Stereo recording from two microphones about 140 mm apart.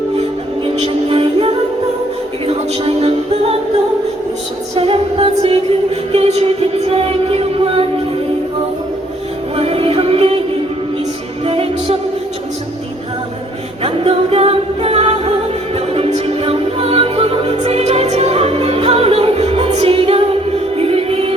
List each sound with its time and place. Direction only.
1.1 s music: 40° right (ahead or behind)
4.7 s music: 40° right (ahead or behind)
9.6 s music: 45° right (ahead or behind)
11.4 s music: 45° right (ahead or behind)
13.8 s music: 40° right (ahead or behind)